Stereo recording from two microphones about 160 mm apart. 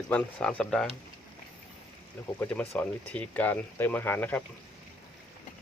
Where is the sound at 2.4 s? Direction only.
10° left (ahead or behind).